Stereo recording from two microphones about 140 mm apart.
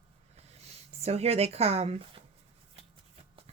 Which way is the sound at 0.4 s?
50° right (ahead or behind).